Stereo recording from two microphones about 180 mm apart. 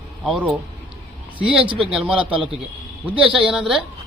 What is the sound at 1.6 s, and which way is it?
Speech, 30° right (ahead or behind).